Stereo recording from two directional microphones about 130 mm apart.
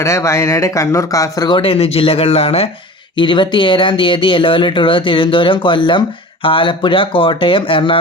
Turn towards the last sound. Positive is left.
turn(degrees=40)  # may be behind; listen again after turning